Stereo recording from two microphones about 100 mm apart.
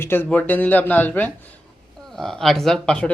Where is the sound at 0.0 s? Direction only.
20° left (ahead or behind).